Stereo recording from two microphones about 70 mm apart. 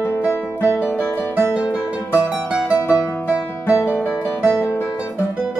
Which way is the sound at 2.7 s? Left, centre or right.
Left.